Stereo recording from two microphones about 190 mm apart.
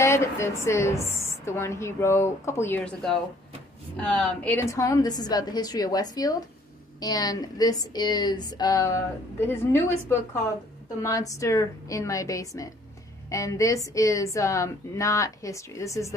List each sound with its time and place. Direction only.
0.0 s a woman's voice: 15° left (ahead or behind)